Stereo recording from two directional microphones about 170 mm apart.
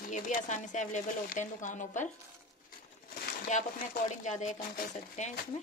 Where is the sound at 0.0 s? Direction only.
50° left (ahead or behind).